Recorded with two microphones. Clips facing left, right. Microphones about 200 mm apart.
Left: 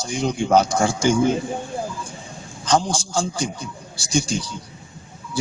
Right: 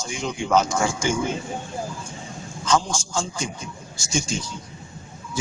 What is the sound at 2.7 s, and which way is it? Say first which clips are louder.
Speech: left 2 dB; 35° left (ahead or behind).